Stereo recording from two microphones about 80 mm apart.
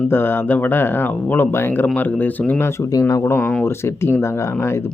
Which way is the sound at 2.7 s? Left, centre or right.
Left.